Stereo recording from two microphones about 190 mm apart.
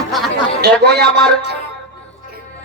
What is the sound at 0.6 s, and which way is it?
Speech, 60° right (ahead or behind).